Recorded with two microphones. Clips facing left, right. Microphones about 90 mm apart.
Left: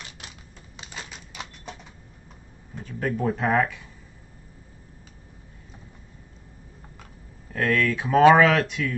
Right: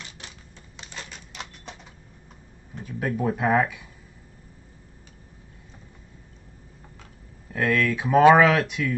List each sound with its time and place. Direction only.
0.7 s typewriter: 5° left (ahead or behind)
2.7 s speech: 5° right (ahead or behind)
7.5 s speech: 5° right (ahead or behind)